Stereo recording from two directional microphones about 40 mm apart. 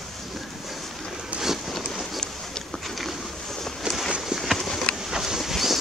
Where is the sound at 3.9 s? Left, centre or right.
Right.